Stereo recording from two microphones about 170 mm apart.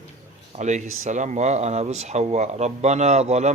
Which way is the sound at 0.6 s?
45° right (ahead or behind).